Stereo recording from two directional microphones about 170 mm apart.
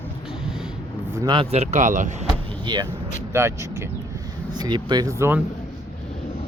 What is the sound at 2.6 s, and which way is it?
Speech, 25° right (ahead or behind).